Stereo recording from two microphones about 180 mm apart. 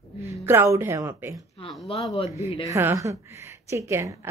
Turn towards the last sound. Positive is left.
turn(degrees=-15)  # may be behind; listen again after turning